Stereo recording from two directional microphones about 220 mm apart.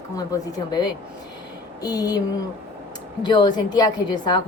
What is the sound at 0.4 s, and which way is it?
A woman's voice, 15° left (ahead or behind).